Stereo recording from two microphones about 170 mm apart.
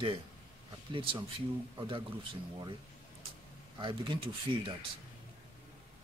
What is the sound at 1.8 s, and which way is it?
Speech, 30° right (ahead or behind).